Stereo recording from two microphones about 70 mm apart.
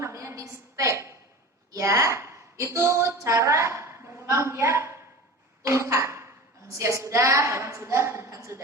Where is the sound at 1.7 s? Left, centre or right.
Right.